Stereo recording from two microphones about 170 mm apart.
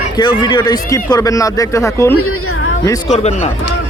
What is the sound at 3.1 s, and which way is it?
Speech, 40° left (ahead or behind).